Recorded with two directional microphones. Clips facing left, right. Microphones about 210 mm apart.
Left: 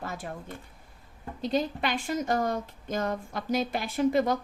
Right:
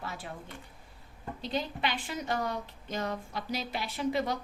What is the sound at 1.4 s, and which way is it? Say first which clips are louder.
A woman's voice: left 5 dB; 45° left (ahead or behind).